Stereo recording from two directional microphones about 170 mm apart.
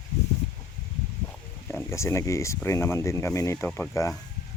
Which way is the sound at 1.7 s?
15° left (ahead or behind).